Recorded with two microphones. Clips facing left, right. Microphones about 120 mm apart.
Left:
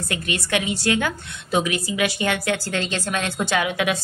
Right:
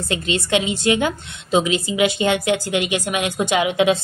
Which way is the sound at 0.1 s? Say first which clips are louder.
Right 5 dB; 20° right (ahead or behind).